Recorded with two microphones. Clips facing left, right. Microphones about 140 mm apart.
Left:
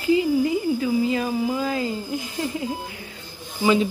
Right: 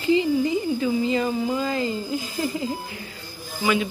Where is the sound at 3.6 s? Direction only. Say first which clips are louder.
Left 4 dB; 25° left (ahead or behind).